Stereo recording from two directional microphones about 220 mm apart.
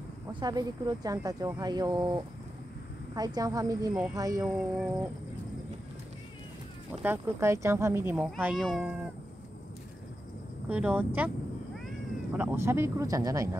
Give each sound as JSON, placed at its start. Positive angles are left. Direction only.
{"t": 0.3, "sound": "speech", "side_deg": -20}
{"t": 4.6, "sound": "speech", "side_deg": -5}
{"t": 6.9, "sound": "speech", "side_deg": -10}
{"t": 10.7, "sound": "speech", "side_deg": -5}